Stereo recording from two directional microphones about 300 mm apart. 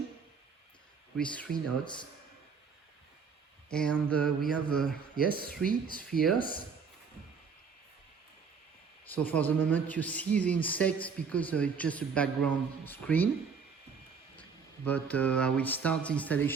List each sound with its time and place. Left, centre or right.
1.1 s a man's voice: centre
1.8 s speech: centre
3.7 s a man's voice: centre
5.5 s speech: left
9.0 s a man's voice: centre
14.8 s a man's voice: centre